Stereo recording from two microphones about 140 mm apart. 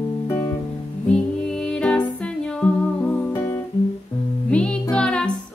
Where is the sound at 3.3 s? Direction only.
20° left (ahead or behind).